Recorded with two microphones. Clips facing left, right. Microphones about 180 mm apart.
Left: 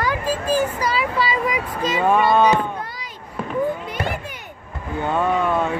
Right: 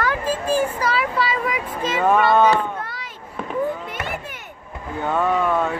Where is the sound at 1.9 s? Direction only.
10° left (ahead or behind).